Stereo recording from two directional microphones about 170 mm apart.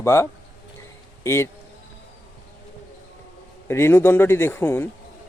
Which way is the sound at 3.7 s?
15° left (ahead or behind).